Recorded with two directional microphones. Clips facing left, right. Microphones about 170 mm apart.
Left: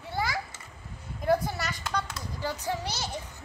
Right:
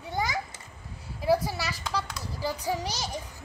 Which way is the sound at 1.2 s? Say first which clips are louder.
Right 1 dB; 5° right (ahead or behind).